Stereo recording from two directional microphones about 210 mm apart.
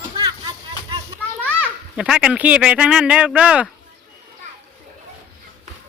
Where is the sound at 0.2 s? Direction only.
25° right (ahead or behind).